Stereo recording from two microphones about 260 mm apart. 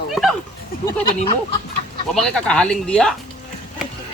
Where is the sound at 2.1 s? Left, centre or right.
Centre.